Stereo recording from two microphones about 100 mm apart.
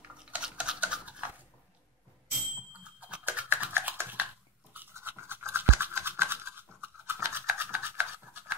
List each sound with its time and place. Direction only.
0.2 s a sound: 10° right (ahead or behind)
3.0 s typing: 15° right (ahead or behind)
4.7 s toothbrush: 20° right (ahead or behind)